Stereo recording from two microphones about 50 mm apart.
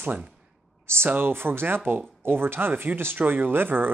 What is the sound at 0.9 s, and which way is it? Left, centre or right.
Speech, right.